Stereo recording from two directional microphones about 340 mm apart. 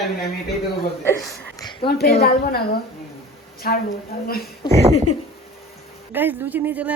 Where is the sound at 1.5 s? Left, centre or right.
Centre.